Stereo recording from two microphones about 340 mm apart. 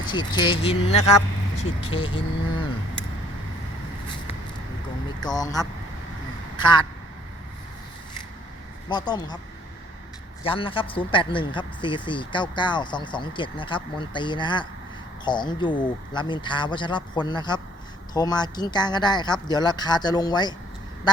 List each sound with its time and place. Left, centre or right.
0.1 s speech: centre
5.2 s speech: centre
8.9 s speech: centre
10.4 s speech: centre